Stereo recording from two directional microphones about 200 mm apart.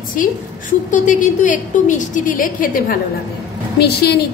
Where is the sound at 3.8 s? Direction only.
55° left (ahead or behind).